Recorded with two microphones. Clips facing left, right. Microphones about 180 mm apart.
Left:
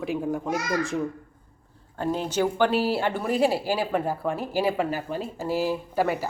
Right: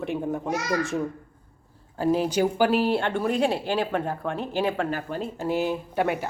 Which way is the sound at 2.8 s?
5° left (ahead or behind).